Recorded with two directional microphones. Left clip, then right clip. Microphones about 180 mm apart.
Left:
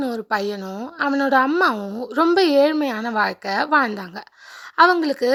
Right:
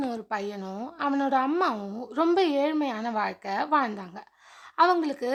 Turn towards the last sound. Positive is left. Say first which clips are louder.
# left 7 dB
turn(degrees=30)  # may be behind; listen again after turning